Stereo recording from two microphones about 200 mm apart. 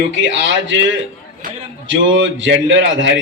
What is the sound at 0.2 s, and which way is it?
A man's voice, 70° right (ahead or behind).